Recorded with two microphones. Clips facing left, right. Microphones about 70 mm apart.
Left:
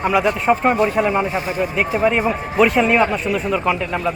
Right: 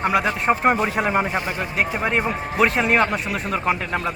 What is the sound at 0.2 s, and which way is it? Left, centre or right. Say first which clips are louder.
A man's voice: left 3 dB; centre.